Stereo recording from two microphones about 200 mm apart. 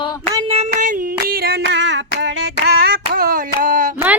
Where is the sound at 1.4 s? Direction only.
55° right (ahead or behind).